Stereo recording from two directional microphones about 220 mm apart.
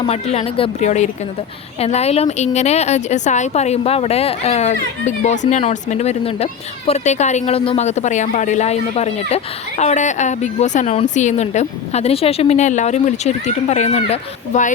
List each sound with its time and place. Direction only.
0.0 s a woman's voice: 30° left (ahead or behind)